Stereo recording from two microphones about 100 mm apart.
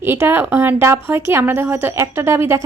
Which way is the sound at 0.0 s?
25° right (ahead or behind).